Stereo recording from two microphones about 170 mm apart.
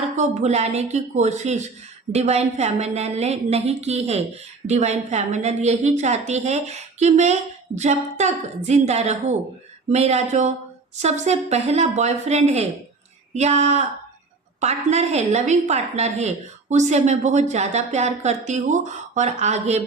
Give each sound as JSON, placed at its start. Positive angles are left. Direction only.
{"t": 0.2, "sound": "a woman's voice", "side_deg": -40}